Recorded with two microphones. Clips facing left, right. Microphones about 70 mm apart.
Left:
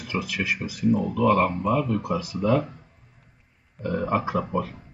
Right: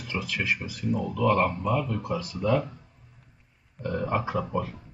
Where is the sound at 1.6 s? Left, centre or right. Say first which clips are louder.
Left 4 dB; centre.